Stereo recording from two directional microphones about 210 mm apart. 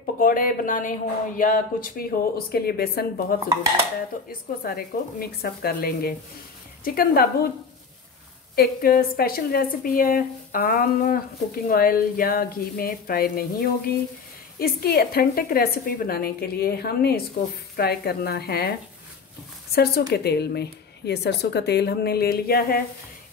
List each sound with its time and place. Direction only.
0.0 s a woman's voice: 40° left (ahead or behind)
8.5 s a woman's voice: 45° left (ahead or behind)
19.7 s a woman's voice: 50° left (ahead or behind)